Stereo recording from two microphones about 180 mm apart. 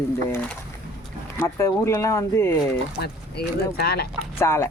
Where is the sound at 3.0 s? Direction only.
65° left (ahead or behind).